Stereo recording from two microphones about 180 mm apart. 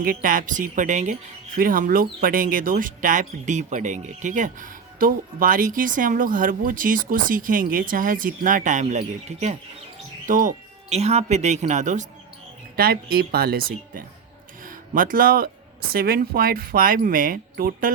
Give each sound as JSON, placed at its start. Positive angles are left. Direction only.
{"t": 0.0, "sound": "speech", "side_deg": -50}
{"t": 12.7, "sound": "speech", "side_deg": -60}